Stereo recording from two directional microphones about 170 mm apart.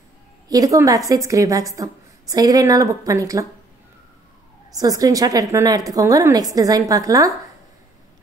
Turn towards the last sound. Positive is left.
turn(degrees=-20)  # may be behind; listen again after turning